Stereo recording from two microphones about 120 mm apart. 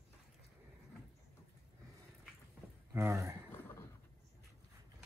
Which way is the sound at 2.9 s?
20° right (ahead or behind).